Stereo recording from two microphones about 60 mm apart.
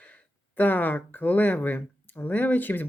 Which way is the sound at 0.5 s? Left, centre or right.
Left.